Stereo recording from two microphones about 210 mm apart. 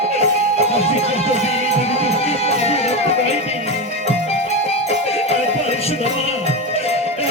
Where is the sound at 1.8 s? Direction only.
30° left (ahead or behind).